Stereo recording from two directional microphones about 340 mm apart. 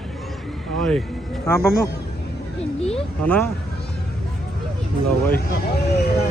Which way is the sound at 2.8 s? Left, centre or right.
Centre.